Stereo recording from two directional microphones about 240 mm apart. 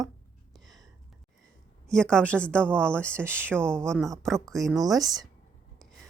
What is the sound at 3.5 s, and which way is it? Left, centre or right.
Speech, centre.